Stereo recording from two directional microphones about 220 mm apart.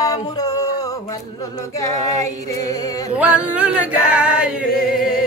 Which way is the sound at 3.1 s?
5° right (ahead or behind).